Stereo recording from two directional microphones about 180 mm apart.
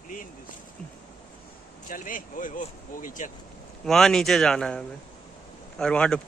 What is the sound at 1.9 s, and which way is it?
Speech, 50° left (ahead or behind).